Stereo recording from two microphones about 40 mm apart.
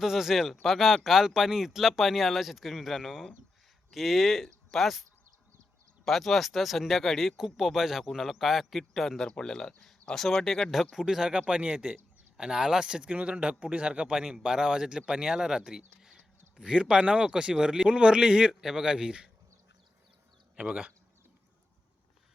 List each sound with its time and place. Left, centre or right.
0.0 s speech: centre
6.1 s speech: centre
11.0 s speech: centre
11.4 s speech: right
18.6 s speech: centre